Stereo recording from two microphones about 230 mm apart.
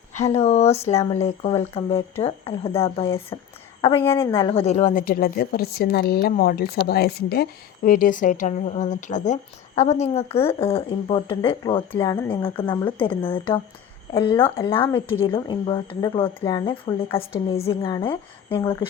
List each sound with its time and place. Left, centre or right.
0.1 s speech: left
4.6 s speech: left; by 14.7 s centre
14.7 s speech: left